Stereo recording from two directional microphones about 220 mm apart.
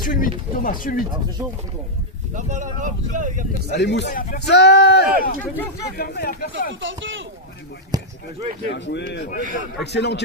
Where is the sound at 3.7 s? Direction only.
50° left (ahead or behind).